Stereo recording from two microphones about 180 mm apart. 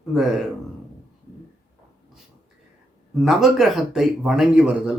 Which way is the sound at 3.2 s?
Centre (ahead or behind).